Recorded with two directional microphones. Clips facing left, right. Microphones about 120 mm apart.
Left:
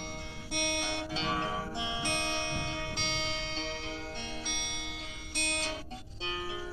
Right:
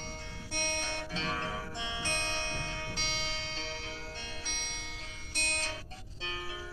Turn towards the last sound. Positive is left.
turn(degrees=15)  # may be behind; listen again after turning